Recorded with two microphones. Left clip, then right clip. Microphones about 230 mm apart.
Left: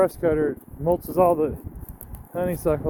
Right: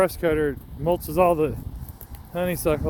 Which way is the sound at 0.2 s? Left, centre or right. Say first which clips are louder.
Left 1 dB; right.